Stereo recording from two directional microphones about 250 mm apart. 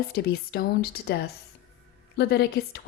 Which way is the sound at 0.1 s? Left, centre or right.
Left.